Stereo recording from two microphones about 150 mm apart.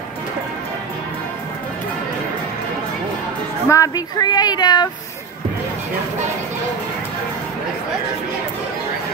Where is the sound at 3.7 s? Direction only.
25° left (ahead or behind).